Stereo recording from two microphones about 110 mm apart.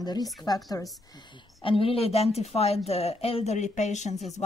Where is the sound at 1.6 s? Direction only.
55° left (ahead or behind).